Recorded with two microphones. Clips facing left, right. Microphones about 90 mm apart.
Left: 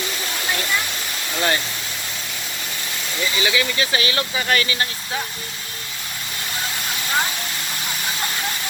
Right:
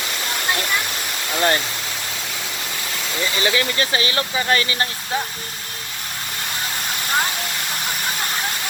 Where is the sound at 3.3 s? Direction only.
40° right (ahead or behind).